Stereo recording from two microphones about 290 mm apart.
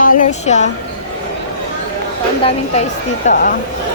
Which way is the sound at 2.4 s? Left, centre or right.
Centre.